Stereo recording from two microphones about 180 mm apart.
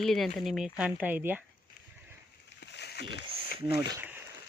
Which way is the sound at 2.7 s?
70° left (ahead or behind).